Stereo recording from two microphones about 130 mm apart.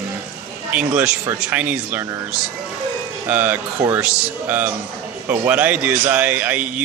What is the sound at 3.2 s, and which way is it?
Speech, 10° right (ahead or behind).